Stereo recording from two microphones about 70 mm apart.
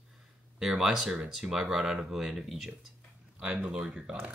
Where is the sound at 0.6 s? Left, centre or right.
Centre.